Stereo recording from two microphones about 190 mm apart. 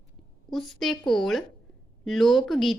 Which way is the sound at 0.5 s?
Centre (ahead or behind).